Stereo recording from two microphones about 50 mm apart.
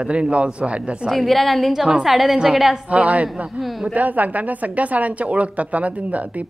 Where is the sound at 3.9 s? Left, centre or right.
Right.